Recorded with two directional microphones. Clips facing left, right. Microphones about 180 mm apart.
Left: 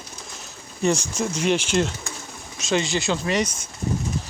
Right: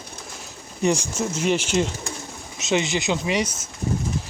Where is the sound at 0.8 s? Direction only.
15° right (ahead or behind).